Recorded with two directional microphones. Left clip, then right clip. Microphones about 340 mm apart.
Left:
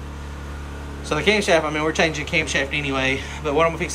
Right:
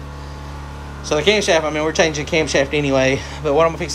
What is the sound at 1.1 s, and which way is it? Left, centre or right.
Speech, centre.